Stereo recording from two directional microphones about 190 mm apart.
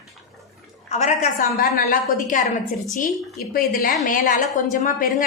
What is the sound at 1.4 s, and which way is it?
A woman's voice, 50° left (ahead or behind).